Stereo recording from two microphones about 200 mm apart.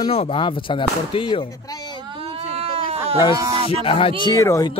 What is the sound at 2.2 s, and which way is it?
Sheep, 30° right (ahead or behind).